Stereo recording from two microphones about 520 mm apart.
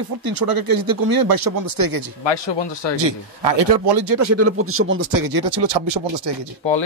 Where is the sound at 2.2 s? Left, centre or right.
Left.